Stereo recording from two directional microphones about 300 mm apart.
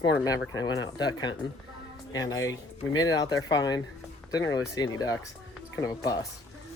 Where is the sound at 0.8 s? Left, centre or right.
Centre.